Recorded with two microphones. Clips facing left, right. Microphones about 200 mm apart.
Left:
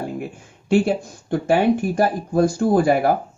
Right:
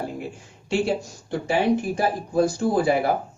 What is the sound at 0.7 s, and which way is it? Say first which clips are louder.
Speech: left 5 dB; 55° left (ahead or behind).